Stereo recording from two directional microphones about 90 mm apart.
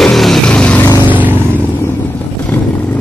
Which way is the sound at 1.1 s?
20° right (ahead or behind).